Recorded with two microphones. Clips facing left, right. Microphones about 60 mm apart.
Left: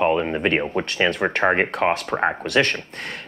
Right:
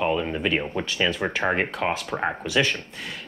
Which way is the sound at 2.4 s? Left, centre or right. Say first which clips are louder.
Left 3 dB; left.